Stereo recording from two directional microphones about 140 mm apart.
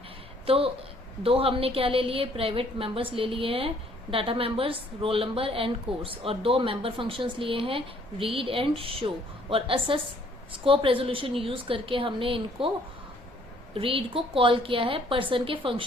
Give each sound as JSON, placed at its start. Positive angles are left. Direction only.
{"t": 0.4, "sound": "a woman's voice", "side_deg": -45}
{"t": 13.7, "sound": "a woman's voice", "side_deg": -40}